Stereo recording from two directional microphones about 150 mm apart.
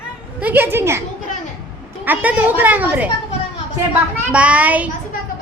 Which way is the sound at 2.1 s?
10° right (ahead or behind).